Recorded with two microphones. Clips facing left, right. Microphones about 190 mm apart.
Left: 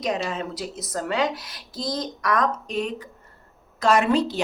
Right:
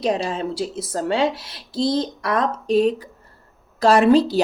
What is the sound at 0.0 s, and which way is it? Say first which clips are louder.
Speech: right 4 dB; 30° right (ahead or behind).